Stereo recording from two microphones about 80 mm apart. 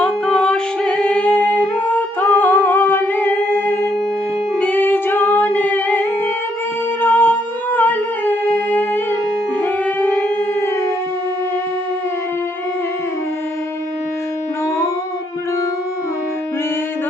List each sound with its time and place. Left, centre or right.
0.0 s music: centre